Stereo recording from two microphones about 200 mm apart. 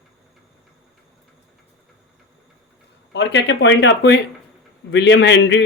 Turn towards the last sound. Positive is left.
turn(degrees=65)  # may be behind; listen again after turning